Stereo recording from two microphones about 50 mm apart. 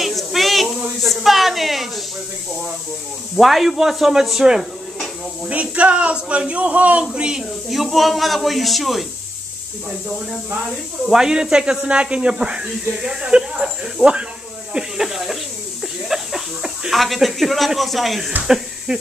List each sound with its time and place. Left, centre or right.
0.0 s a sound: centre
3.3 s speech: centre
5.5 s a man's voice: right
7.2 s speech: centre
7.7 s speech: centre
11.1 s a man's voice: centre
15.8 s a sound: centre
16.9 s speech: centre